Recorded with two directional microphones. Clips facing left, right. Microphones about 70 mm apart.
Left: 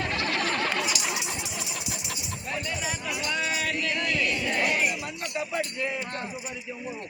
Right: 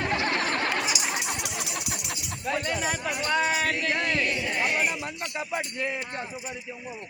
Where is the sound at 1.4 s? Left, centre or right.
Right.